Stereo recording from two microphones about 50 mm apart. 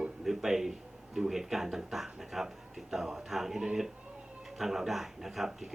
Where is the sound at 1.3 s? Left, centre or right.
Centre.